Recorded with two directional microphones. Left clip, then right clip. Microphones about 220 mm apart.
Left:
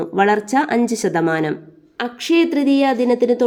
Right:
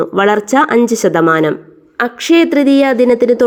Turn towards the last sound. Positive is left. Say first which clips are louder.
# right 6 dB
turn(degrees=-20)  # may be behind; listen again after turning